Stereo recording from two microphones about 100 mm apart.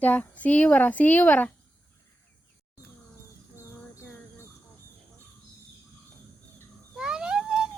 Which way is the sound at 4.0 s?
25° left (ahead or behind).